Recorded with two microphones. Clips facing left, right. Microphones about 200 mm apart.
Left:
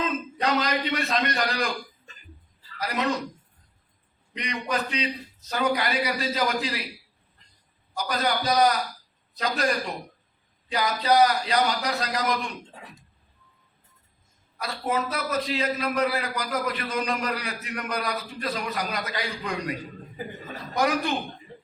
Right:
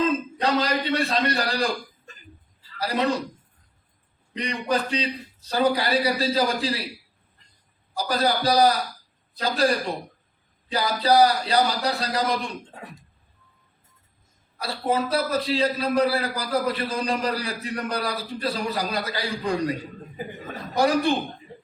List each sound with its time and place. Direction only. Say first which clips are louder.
0.4 s a man's voice: right 2 dB; 30° right (ahead or behind)
2.7 s speech: right 4 dB; 30° right (ahead or behind)
4.4 s a man's voice: right 4 dB; 30° right (ahead or behind)
7.9 s a man's voice: right 3 dB; 30° right (ahead or behind)
14.6 s a man's voice: right 3 dB; 30° right (ahead or behind)
20.7 s a man's voice: right 4 dB; 30° right (ahead or behind)